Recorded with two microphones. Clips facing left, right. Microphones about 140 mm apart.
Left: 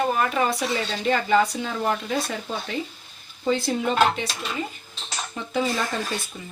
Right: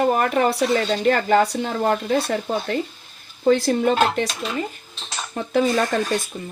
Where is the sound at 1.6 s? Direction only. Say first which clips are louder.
Right 5 dB; 50° right (ahead or behind).